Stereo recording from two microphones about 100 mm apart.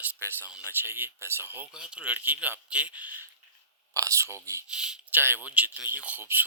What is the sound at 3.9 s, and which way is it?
Speech, 30° right (ahead or behind).